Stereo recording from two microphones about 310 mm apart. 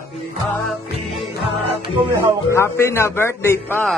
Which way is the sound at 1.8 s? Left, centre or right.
Centre.